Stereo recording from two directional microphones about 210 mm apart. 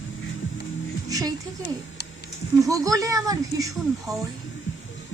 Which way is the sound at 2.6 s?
15° right (ahead or behind).